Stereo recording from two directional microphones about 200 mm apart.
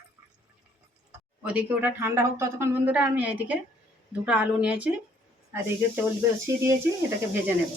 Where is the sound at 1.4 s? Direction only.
10° right (ahead or behind).